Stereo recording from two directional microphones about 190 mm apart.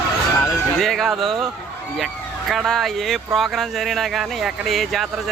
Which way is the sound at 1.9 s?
Centre (ahead or behind).